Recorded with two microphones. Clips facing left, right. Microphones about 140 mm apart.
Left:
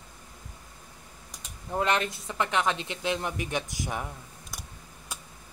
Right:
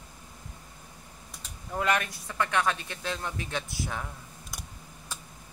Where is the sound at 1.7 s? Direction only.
25° left (ahead or behind).